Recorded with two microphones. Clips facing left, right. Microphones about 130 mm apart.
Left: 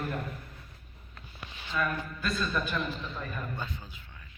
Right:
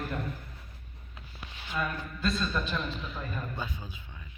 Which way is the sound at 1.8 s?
25° right (ahead or behind).